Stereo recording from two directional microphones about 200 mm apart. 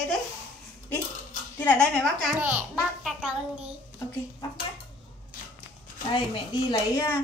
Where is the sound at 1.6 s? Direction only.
10° left (ahead or behind).